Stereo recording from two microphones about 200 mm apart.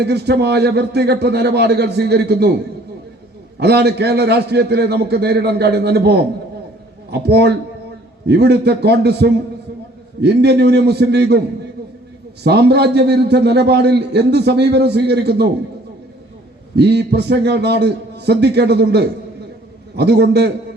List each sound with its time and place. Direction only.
0.0 s a man's voice: 55° right (ahead or behind)
3.6 s a man's voice: 55° right (ahead or behind)
16.7 s a man's voice: 55° right (ahead or behind)